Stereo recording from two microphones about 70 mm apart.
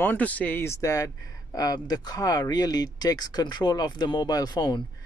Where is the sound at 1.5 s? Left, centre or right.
Left.